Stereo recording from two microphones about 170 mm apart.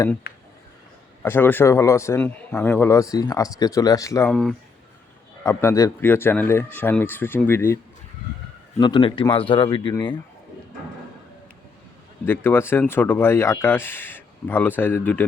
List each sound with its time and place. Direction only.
0.3 s a sound: 65° left (ahead or behind)
1.2 s a man's voice: 10° left (ahead or behind)
4.3 s speech: 5° left (ahead or behind)
5.4 s a man's voice: 15° left (ahead or behind)
8.8 s speech: 30° left (ahead or behind)
12.2 s a man's voice: 10° left (ahead or behind)